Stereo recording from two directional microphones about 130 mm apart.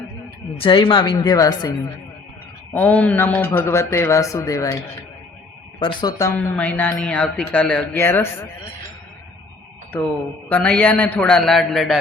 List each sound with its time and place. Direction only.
0.6 s speech: 40° left (ahead or behind)
2.7 s speech: 15° left (ahead or behind)
5.8 s speech: 30° left (ahead or behind)
6.3 s speech: 10° left (ahead or behind)
10.5 s speech: 10° left (ahead or behind)